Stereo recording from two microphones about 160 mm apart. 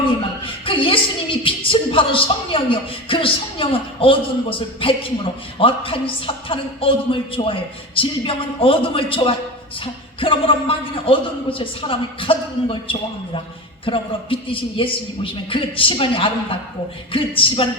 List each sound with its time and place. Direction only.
0.4 s a woman's voice: 35° left (ahead or behind)